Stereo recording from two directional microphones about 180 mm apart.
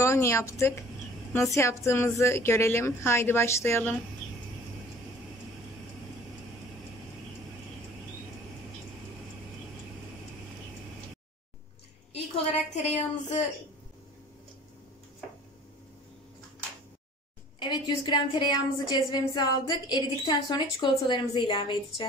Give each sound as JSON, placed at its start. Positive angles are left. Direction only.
{"t": 0.0, "sound": "a woman's voice", "side_deg": 15}
{"t": 12.7, "sound": "a sound", "side_deg": 35}
{"t": 17.6, "sound": "a woman's voice", "side_deg": 25}